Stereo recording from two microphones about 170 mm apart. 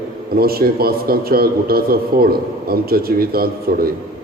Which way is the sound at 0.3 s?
60° right (ahead or behind).